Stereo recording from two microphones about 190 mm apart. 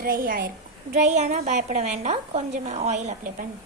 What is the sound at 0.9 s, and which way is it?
A woman's voice, 40° right (ahead or behind).